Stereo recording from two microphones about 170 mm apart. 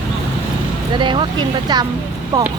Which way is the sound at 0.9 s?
30° right (ahead or behind).